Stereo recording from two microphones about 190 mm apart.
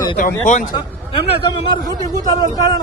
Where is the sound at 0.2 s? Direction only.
40° left (ahead or behind).